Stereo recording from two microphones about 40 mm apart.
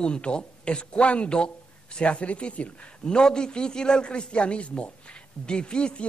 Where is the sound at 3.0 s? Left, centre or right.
Centre.